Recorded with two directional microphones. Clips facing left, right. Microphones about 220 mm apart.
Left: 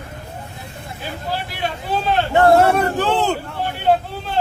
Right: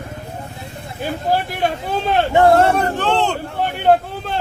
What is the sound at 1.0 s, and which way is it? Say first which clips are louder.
Speech: right 7 dB; 50° right (ahead or behind).